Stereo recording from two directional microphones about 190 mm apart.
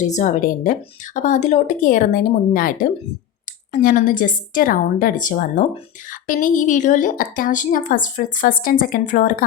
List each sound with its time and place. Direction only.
0.0 s speech: 40° left (ahead or behind)